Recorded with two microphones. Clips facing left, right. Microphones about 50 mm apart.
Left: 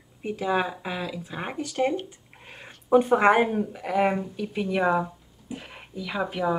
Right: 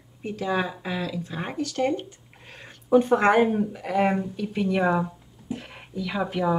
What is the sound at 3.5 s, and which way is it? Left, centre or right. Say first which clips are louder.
Speech: right 2 dB; centre.